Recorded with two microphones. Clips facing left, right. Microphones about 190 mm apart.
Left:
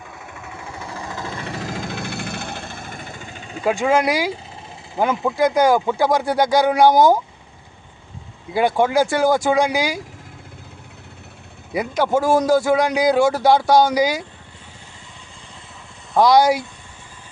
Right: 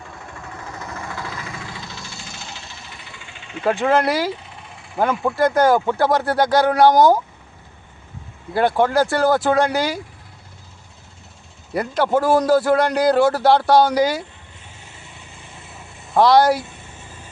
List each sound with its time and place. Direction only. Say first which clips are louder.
0.0 s vehicle: even; 5° left (ahead or behind); by 1.5 s 25° left (ahead or behind)
1.5 s engine: left 7 dB; 45° left (ahead or behind)
3.6 s speech: even; 10° left (ahead or behind)
5.3 s speech: even; 15° left (ahead or behind)
8.8 s speech: left 1 dB; 10° left (ahead or behind)
11.7 s speech: even; 10° left (ahead or behind)
12.2 s speech: even; 5° right (ahead or behind)
13.7 s speech: even; 10° left (ahead or behind)
16.2 s speech: even; 15° left (ahead or behind)